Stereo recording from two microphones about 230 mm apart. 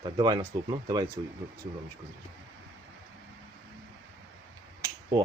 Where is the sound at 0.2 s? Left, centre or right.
Centre.